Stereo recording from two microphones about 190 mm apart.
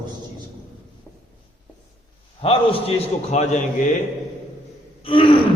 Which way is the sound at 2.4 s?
30° left (ahead or behind).